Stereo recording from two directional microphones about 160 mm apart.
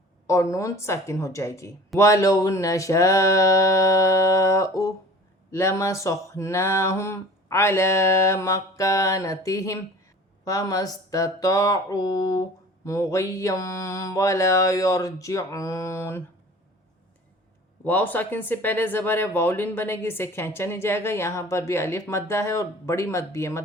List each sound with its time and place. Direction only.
0.5 s speech: 20° left (ahead or behind)
17.8 s speech: 10° left (ahead or behind)